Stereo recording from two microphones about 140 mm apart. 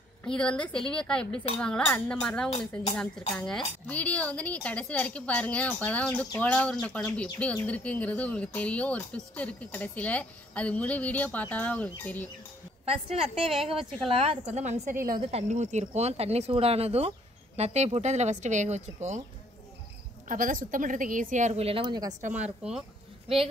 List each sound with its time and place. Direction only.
0.2 s speech: 5° left (ahead or behind)
12.8 s speech: 45° right (ahead or behind); by 15.8 s 60° right (ahead or behind)
15.9 s speech: 50° right (ahead or behind)
20.2 s a woman's voice: 70° right (ahead or behind); by 22.1 s 30° right (ahead or behind)
22.6 s speech: 5° right (ahead or behind)
23.2 s speech: 40° right (ahead or behind)